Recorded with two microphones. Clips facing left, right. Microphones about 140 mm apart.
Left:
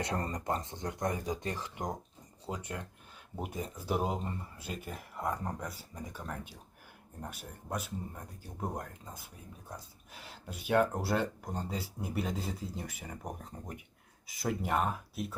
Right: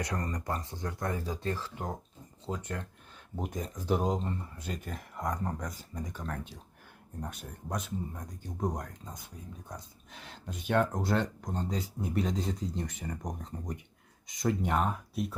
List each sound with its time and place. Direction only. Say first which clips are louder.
0.0 s speech: even; 25° left (ahead or behind); by 15.4 s centre (ahead or behind)